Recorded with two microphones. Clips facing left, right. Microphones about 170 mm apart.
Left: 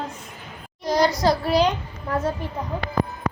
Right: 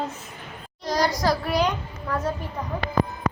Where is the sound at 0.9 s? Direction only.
25° left (ahead or behind).